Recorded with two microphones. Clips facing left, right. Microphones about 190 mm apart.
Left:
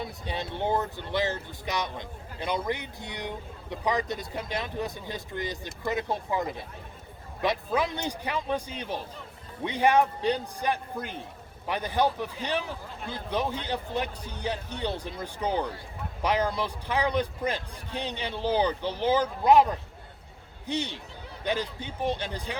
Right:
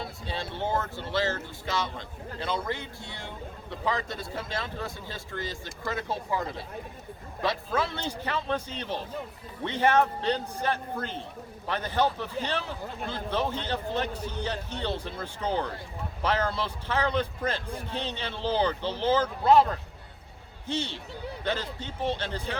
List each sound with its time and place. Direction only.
0.0 s speech: 20° left (ahead or behind)